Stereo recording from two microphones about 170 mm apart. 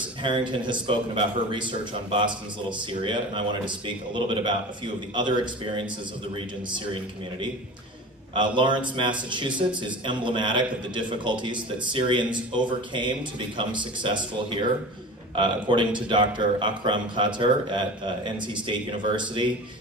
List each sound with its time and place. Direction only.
0.2 s a man's voice: 30° right (ahead or behind)
8.4 s a man's voice: 30° right (ahead or behind)